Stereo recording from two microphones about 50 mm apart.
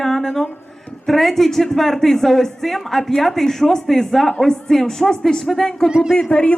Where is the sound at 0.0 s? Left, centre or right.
Centre.